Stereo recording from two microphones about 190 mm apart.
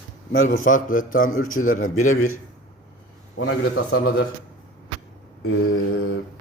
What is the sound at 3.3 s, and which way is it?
Mantra, 90° left.